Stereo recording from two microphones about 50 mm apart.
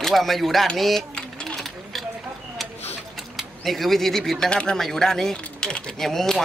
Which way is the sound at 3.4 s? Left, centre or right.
Centre.